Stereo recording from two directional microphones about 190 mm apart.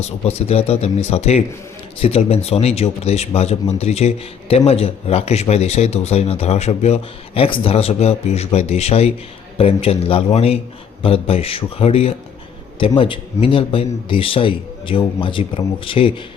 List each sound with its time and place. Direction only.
0.0 s a man's voice: 35° left (ahead or behind)